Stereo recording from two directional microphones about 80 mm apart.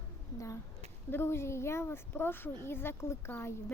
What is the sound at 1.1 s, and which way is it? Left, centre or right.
A woman's voice, left.